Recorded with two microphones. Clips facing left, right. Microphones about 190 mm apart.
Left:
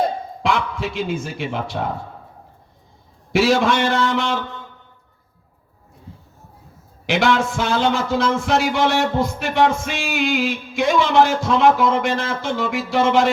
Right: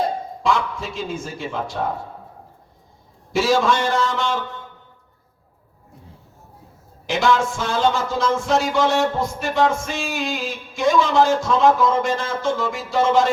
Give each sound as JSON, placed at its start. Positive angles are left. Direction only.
{"t": 0.4, "sound": "speech", "side_deg": 65}
{"t": 3.3, "sound": "a man's voice", "side_deg": 65}
{"t": 7.1, "sound": "speech", "side_deg": 65}